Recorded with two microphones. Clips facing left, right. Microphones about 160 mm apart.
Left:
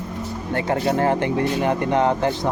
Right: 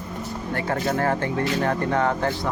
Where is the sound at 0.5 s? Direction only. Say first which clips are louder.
Left 4 dB; 20° left (ahead or behind).